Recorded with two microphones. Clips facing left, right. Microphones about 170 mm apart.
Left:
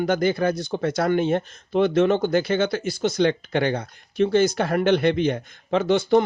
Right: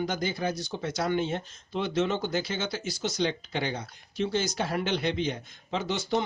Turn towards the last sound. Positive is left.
turn(degrees=55)  # may be behind; listen again after turning